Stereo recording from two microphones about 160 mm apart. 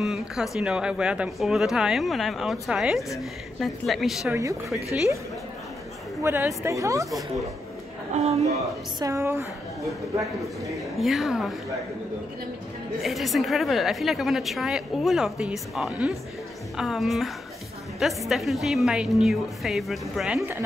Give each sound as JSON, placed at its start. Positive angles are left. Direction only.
{"t": 0.0, "sound": "a woman's voice", "side_deg": 0}
{"t": 6.2, "sound": "a woman's voice", "side_deg": -15}
{"t": 8.1, "sound": "a man's voice", "side_deg": -40}
{"t": 9.0, "sound": "a woman's voice", "side_deg": -15}
{"t": 11.0, "sound": "a woman's voice", "side_deg": 0}
{"t": 13.0, "sound": "a woman's voice", "side_deg": 0}
{"t": 18.3, "sound": "a woman's voice", "side_deg": 0}